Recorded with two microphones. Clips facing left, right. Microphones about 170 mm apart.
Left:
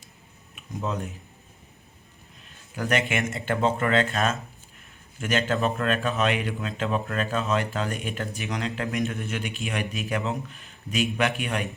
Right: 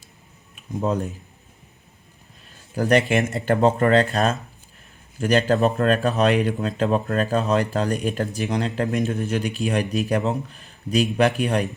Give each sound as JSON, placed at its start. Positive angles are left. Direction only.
{"t": 0.5, "sound": "speech", "side_deg": -35}
{"t": 2.5, "sound": "speech", "side_deg": -35}